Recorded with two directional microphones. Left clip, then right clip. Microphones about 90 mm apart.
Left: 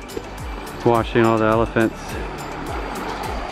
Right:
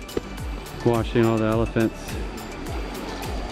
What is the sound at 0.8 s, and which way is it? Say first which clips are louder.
Speech: left 5 dB; 20° left (ahead or behind).